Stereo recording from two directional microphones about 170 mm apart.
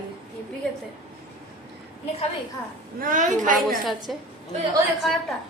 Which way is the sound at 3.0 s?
50° right (ahead or behind).